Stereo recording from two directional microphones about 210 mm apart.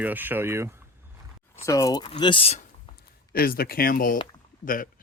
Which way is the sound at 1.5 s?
15° left (ahead or behind).